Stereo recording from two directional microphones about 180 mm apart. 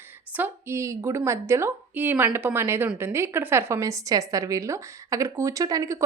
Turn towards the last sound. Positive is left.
turn(degrees=-15)  # may be behind; listen again after turning